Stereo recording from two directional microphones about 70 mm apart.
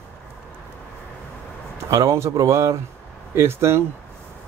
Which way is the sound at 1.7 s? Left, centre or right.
Right.